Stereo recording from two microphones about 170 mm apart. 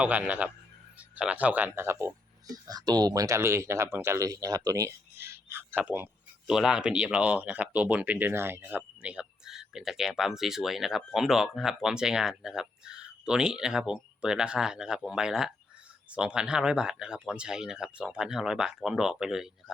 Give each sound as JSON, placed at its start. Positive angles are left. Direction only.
{"t": 0.0, "sound": "speech", "side_deg": -10}